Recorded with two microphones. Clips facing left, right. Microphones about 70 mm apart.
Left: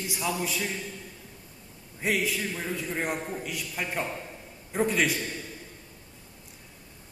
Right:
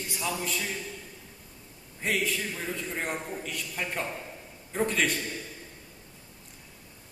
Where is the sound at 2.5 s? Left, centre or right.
Centre.